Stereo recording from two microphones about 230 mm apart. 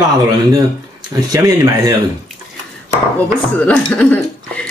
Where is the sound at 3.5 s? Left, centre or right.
Centre.